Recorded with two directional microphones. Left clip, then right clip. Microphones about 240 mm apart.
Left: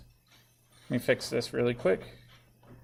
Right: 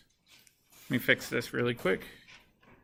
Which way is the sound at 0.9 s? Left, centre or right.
Centre.